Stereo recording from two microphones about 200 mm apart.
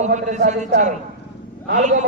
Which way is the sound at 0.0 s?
35° right (ahead or behind).